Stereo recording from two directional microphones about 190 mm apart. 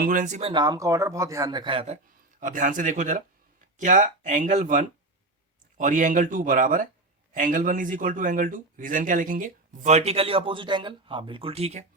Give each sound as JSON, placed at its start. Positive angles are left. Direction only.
{"t": 0.0, "sound": "speech", "side_deg": -45}
{"t": 0.5, "sound": "speech", "side_deg": -20}
{"t": 2.4, "sound": "speech", "side_deg": -45}